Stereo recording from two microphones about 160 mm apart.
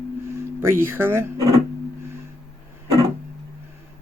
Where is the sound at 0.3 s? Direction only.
15° right (ahead or behind).